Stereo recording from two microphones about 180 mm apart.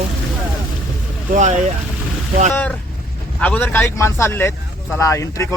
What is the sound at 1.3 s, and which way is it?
Speech, 40° right (ahead or behind).